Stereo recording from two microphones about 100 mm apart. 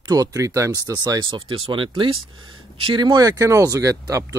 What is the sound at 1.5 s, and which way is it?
Speech, 60° right (ahead or behind).